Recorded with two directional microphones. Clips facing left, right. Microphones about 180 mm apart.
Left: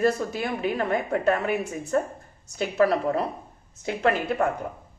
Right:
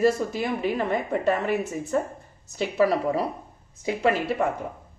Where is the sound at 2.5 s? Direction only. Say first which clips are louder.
Even; 5° right (ahead or behind).